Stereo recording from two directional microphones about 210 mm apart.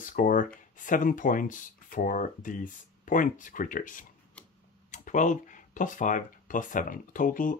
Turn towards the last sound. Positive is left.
turn(degrees=40)  # may be behind; listen again after turning